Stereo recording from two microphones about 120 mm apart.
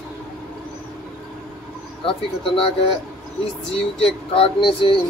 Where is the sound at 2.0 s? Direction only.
50° left (ahead or behind).